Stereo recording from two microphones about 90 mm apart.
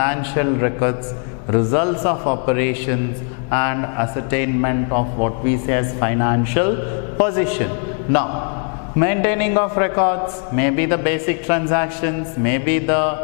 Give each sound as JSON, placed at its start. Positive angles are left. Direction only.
{"t": 0.0, "sound": "a man's voice", "side_deg": 10}